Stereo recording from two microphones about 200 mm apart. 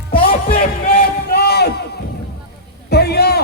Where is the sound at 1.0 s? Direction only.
50° left (ahead or behind).